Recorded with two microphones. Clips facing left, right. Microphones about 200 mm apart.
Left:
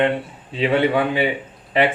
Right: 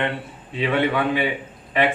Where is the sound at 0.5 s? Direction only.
30° left (ahead or behind).